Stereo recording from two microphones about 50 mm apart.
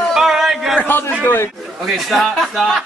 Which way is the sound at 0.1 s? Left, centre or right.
Centre.